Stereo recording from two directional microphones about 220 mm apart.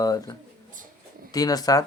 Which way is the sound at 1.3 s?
15° left (ahead or behind).